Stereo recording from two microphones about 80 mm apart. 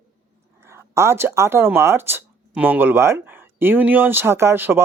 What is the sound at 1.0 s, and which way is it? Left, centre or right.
Speech, right.